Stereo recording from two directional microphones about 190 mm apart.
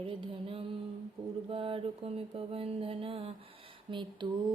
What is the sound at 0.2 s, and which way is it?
Mantra, 30° right (ahead or behind).